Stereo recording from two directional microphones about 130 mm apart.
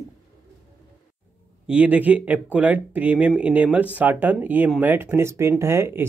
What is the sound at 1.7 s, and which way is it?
Speech, 10° right (ahead or behind).